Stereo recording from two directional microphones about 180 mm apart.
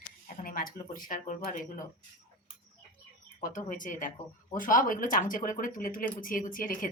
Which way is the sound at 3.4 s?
50° left (ahead or behind).